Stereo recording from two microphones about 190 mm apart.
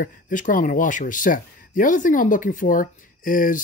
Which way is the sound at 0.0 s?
45° left (ahead or behind).